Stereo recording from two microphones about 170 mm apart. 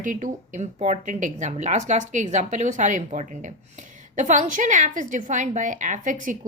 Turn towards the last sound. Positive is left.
turn(degrees=-50)  # may be behind; listen again after turning